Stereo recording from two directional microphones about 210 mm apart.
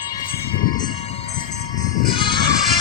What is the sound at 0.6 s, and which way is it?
Music, 20° left (ahead or behind).